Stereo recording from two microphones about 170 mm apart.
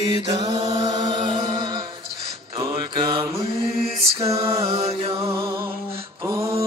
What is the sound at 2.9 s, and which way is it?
Mantra, 30° right (ahead or behind).